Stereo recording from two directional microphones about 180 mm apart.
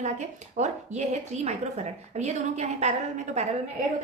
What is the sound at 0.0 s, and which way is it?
A woman's voice, 40° right (ahead or behind).